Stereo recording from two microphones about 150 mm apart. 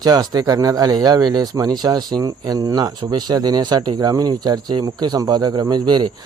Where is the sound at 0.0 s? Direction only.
25° right (ahead or behind).